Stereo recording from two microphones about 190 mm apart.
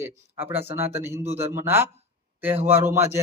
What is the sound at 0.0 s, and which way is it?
Speech, 10° right (ahead or behind).